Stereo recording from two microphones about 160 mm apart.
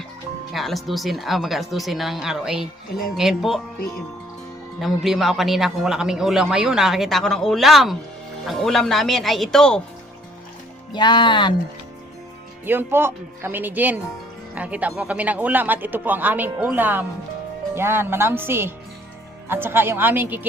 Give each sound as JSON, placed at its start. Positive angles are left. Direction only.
{"t": 0.5, "sound": "speech", "side_deg": 0}
{"t": 4.8, "sound": "speech", "side_deg": 0}
{"t": 10.9, "sound": "speech", "side_deg": 30}
{"t": 12.6, "sound": "speech", "side_deg": -15}